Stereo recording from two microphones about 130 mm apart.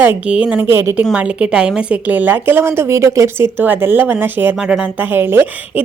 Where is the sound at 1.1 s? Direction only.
10° right (ahead or behind).